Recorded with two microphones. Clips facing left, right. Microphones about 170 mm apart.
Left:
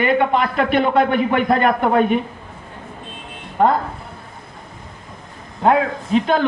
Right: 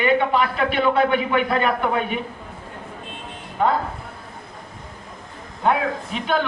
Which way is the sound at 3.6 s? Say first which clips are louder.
Left 4 dB; 45° left (ahead or behind).